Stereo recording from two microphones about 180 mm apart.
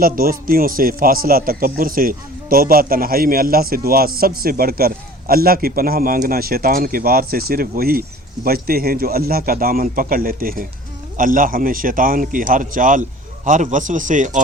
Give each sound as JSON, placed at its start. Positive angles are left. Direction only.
{"t": 0.0, "sound": "a man's voice", "side_deg": -55}